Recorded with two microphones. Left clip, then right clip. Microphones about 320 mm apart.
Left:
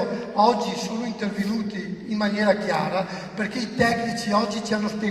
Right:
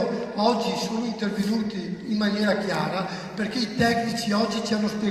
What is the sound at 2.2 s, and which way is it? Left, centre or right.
Speech, centre.